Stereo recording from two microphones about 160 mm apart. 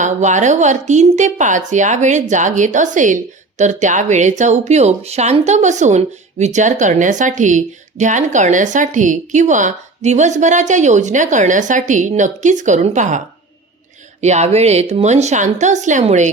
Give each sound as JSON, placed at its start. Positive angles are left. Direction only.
{"t": 0.0, "sound": "speech", "side_deg": -50}